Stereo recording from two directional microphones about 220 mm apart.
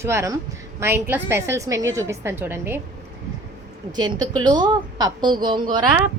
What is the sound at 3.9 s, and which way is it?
A woman's voice, 20° right (ahead or behind).